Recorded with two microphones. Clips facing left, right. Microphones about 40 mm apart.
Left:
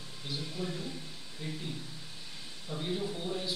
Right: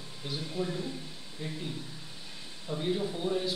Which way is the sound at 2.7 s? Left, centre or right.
Centre.